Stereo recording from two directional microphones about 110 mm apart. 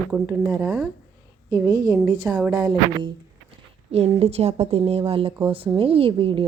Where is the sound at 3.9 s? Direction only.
70° right (ahead or behind).